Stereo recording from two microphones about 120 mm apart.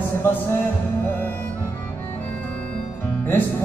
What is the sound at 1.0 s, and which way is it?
Music, 15° left (ahead or behind).